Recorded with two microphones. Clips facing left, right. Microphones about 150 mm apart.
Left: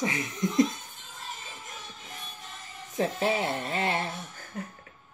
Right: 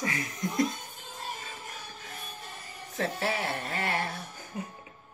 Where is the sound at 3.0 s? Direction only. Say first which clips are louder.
Left 4 dB; 15° left (ahead or behind).